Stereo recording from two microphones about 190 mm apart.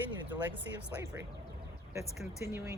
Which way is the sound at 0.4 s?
10° right (ahead or behind).